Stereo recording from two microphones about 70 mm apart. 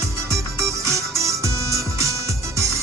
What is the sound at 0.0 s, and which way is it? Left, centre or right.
Music, right.